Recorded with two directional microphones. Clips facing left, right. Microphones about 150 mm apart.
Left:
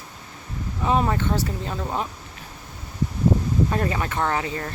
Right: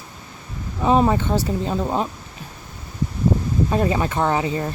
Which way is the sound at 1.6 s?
25° right (ahead or behind).